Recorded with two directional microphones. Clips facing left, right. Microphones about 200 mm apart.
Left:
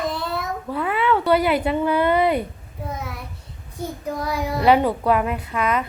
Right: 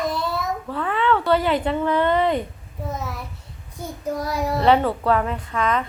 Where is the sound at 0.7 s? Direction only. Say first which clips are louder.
Left 1 dB; 10° left (ahead or behind).